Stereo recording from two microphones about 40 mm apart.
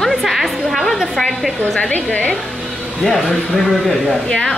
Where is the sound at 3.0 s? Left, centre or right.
Left.